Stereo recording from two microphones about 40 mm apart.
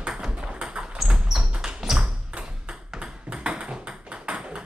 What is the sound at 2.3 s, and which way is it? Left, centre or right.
Ping, right.